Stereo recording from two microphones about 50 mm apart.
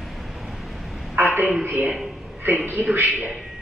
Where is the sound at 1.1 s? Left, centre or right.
Right.